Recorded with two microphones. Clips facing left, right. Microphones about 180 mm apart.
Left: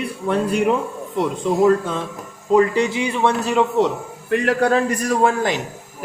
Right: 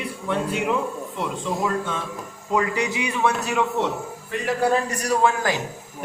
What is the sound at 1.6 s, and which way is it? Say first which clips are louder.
A man's voice: left 8 dB; 35° left (ahead or behind).